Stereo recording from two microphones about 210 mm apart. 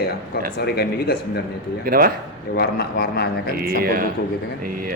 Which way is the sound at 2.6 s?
50° left (ahead or behind).